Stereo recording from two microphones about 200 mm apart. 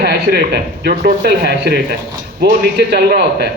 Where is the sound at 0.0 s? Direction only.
50° right (ahead or behind).